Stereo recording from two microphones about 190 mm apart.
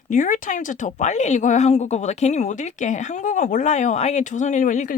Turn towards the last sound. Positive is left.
turn(degrees=40)  # may be behind; listen again after turning